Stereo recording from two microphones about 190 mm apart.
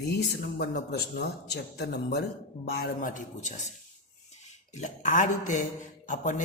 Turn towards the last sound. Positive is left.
turn(degrees=40)  # may be behind; listen again after turning